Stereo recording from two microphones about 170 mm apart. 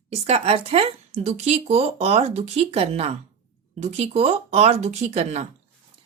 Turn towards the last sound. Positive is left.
turn(degrees=-40)  # may be behind; listen again after turning